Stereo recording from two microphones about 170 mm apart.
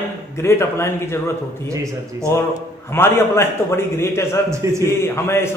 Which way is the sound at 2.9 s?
15° left (ahead or behind).